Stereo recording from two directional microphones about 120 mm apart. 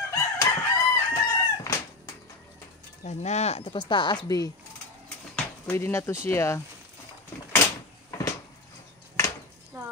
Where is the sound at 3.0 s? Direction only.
70° left (ahead or behind).